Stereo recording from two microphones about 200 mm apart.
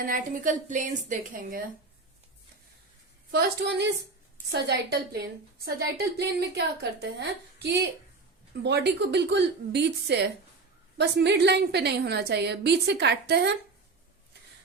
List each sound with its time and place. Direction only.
0.0 s a woman's voice: 40° right (ahead or behind)
3.3 s a woman's voice: 55° right (ahead or behind)